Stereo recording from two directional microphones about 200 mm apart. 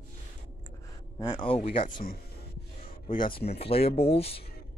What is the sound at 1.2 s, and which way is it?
Speech, 25° left (ahead or behind).